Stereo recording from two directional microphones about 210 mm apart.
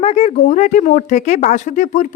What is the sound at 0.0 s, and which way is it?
Speech, 30° left (ahead or behind).